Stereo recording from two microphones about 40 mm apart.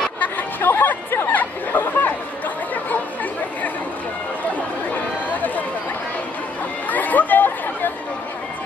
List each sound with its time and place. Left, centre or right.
0.2 s chatter: left
0.7 s chatter: left
1.3 s chatter: left
4.9 s a sound: left
6.9 s chatter: left